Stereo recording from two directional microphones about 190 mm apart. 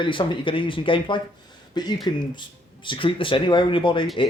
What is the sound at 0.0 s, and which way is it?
Speech, 25° left (ahead or behind).